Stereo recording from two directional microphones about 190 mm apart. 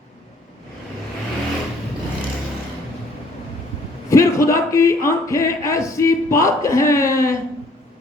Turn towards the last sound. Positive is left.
turn(degrees=15)  # may be behind; listen again after turning